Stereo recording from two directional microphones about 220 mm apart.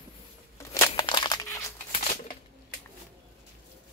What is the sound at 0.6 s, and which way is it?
Crumpling, 15° left (ahead or behind).